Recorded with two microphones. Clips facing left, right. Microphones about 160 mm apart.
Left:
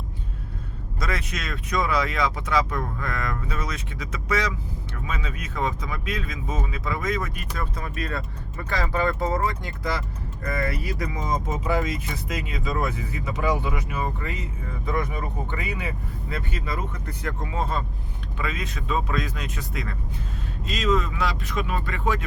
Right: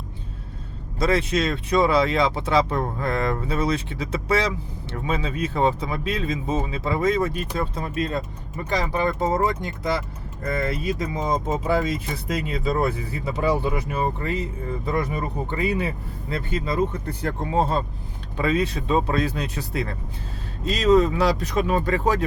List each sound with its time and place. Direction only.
0.9 s speech: 30° right (ahead or behind)
15.5 s speech: 30° right (ahead or behind)